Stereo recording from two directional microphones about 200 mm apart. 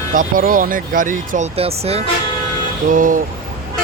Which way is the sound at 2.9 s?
40° right (ahead or behind).